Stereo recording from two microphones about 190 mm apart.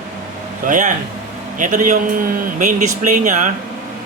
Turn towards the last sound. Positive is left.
turn(degrees=-40)  # may be behind; listen again after turning